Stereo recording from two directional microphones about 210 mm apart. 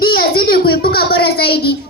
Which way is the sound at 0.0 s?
45° left (ahead or behind).